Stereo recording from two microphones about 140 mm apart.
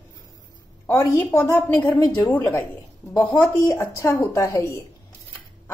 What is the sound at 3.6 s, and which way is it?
A woman's voice, 20° left (ahead or behind).